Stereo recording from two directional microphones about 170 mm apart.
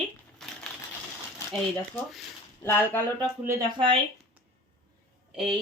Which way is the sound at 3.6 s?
30° right (ahead or behind).